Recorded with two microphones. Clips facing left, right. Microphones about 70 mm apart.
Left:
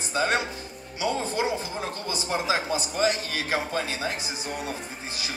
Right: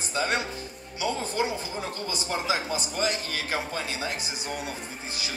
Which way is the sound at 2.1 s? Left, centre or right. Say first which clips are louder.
Left 2 dB; left.